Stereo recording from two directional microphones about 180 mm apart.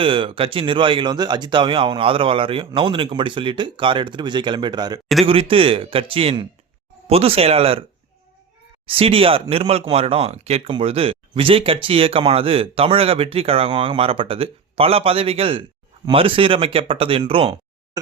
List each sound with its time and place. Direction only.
0.0 s speech: 30° right (ahead or behind)
8.9 s speech: 30° right (ahead or behind)